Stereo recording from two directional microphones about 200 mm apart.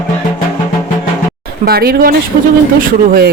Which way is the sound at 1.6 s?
50° right (ahead or behind).